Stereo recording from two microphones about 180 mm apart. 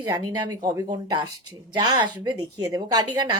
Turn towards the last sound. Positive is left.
turn(degrees=-25)  # may be behind; listen again after turning